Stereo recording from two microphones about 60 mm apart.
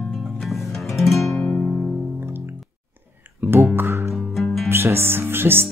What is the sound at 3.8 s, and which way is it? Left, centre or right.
Music, right.